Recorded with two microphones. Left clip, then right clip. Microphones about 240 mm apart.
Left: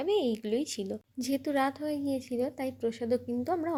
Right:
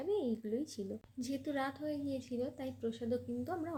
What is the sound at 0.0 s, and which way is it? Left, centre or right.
Speech, centre.